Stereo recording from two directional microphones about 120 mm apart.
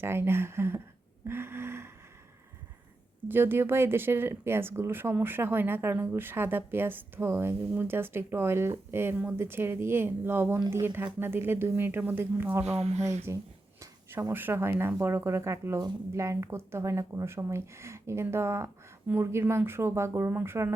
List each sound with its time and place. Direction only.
0.0 s speech: 20° right (ahead or behind)
3.2 s speech: 20° right (ahead or behind)
12.6 s speech: 65° right (ahead or behind)
13.3 s speech: 20° right (ahead or behind)